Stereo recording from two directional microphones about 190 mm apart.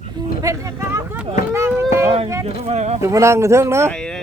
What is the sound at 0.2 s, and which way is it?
Speech, 15° right (ahead or behind).